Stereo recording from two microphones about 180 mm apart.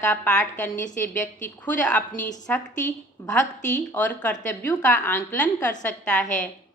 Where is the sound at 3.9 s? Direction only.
10° left (ahead or behind).